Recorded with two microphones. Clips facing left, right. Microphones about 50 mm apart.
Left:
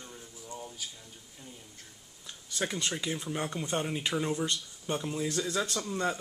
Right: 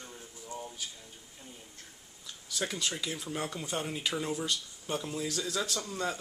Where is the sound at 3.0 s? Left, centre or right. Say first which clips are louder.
Left 2 dB; left.